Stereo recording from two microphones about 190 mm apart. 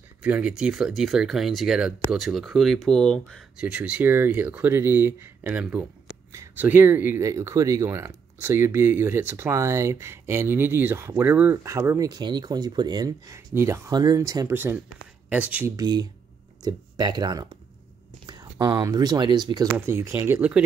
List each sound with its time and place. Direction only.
0.2 s speech: 5° right (ahead or behind)
15.7 s speech: 20° right (ahead or behind)